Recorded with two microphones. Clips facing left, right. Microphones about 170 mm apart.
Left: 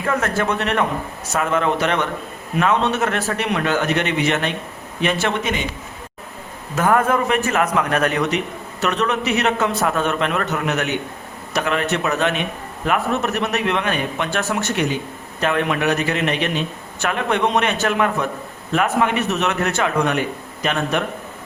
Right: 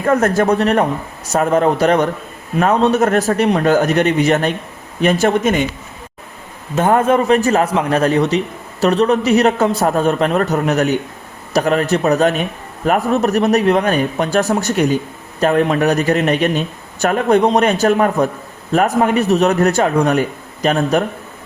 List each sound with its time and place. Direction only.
0.0 s a man's voice: 40° right (ahead or behind)
6.7 s a man's voice: 25° right (ahead or behind)